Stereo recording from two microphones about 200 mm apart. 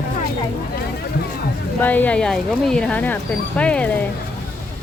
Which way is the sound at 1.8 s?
10° left (ahead or behind).